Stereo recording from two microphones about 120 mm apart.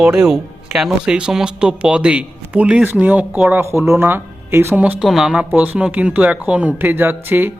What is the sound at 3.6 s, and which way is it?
Speech, 20° right (ahead or behind).